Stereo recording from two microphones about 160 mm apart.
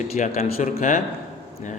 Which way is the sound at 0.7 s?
55° left (ahead or behind).